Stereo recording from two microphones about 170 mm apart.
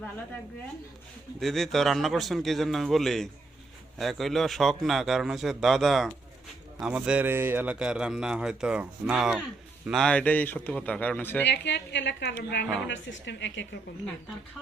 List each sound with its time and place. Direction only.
1.4 s a man's voice: centre (ahead or behind)
11.4 s a woman's voice: 90° left